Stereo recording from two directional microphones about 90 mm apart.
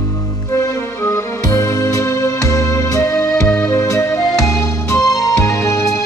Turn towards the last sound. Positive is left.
turn(degrees=40)  # may be behind; listen again after turning